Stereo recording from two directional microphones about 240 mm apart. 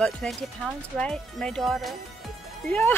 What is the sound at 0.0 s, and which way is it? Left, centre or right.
Speech, centre.